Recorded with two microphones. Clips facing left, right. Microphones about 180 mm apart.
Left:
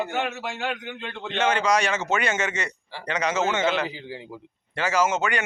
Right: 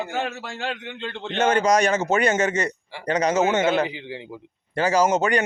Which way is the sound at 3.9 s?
20° right (ahead or behind).